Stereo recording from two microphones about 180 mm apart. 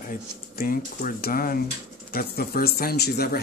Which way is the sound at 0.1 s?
50° left (ahead or behind).